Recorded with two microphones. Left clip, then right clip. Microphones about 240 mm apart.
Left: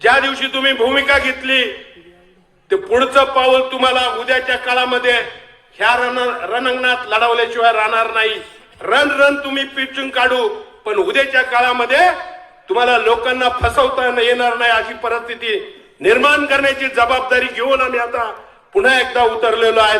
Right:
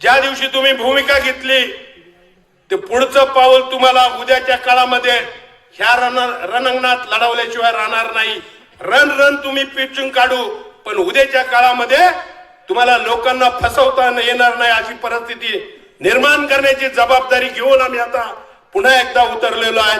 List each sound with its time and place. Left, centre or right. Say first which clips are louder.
0.0 s a man's voice: right 1 dB; right